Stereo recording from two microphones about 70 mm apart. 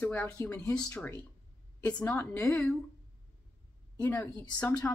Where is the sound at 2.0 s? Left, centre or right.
Left.